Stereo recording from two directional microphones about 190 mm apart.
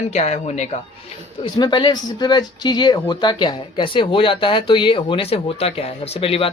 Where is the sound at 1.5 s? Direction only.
25° left (ahead or behind).